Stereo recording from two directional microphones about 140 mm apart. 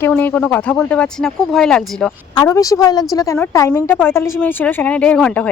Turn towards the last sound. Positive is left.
turn(degrees=5)  # may be behind; listen again after turning